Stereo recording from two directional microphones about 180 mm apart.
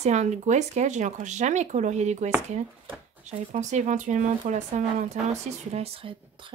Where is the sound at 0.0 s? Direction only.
40° right (ahead or behind).